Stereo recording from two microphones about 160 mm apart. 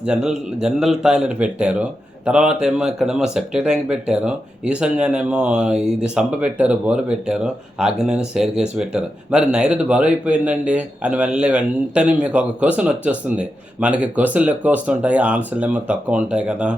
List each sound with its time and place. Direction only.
0.0 s a man's voice: 5° right (ahead or behind)